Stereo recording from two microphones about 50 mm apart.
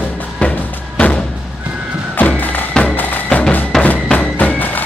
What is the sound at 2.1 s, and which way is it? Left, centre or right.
Music, left.